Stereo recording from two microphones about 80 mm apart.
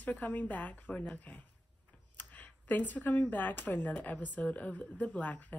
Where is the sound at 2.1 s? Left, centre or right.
Left.